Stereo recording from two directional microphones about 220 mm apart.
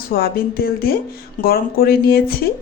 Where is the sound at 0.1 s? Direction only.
45° left (ahead or behind).